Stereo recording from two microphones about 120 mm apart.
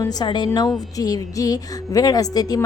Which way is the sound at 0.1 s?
35° left (ahead or behind).